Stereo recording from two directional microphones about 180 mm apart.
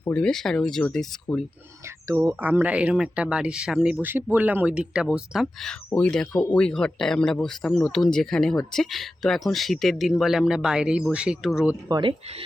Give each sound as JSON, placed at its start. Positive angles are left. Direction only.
{"t": 0.0, "sound": "speech", "side_deg": 5}
{"t": 1.8, "sound": "speech", "side_deg": -15}
{"t": 11.9, "sound": "speech", "side_deg": -25}